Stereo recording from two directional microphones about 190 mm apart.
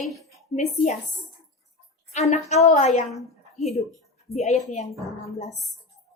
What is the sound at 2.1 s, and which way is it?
A woman's voice, 35° left (ahead or behind).